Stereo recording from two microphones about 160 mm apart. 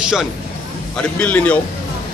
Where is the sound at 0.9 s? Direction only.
10° left (ahead or behind).